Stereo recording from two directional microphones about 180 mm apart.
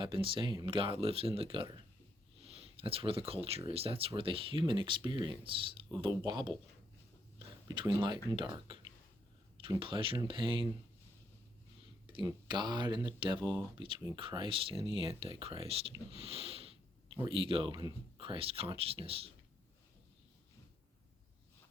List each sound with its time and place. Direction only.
0.0 s speech: 30° right (ahead or behind)
12.1 s speech: 25° right (ahead or behind)